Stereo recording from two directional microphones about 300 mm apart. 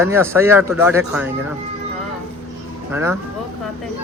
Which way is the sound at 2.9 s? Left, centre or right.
Centre.